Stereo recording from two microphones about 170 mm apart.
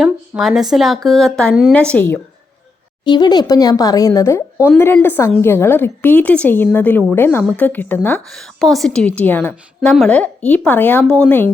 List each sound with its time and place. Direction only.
0.0 s a woman's voice: centre (ahead or behind)
3.0 s a woman's voice: 25° left (ahead or behind); by 11.5 s 10° left (ahead or behind)